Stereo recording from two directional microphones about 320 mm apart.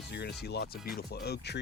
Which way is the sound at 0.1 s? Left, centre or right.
Left.